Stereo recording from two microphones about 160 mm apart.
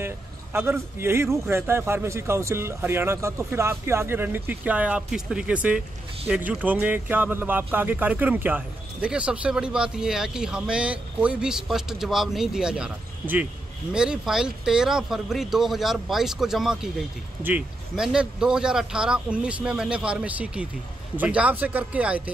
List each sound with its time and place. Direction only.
0.0 s speech: 15° right (ahead or behind)